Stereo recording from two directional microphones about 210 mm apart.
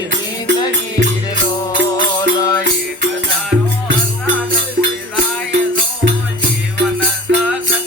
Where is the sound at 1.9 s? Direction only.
20° left (ahead or behind).